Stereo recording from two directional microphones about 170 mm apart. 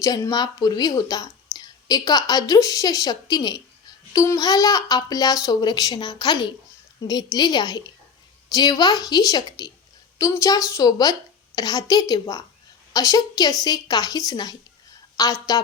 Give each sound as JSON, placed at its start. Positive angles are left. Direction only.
{"t": 0.0, "sound": "speech", "side_deg": 20}